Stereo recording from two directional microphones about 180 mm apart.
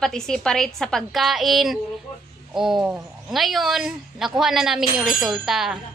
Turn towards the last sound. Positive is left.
turn(degrees=0)  # may be behind; listen again after turning